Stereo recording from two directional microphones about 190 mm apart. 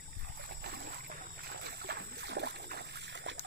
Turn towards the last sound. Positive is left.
turn(degrees=-65)  # may be behind; listen again after turning